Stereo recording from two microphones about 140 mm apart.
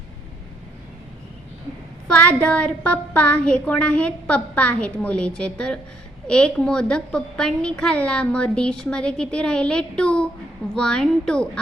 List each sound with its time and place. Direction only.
2.0 s a woman's voice: 10° left (ahead or behind)